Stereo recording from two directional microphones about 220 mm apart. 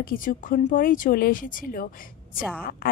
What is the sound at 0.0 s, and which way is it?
A woman's voice, 40° left (ahead or behind).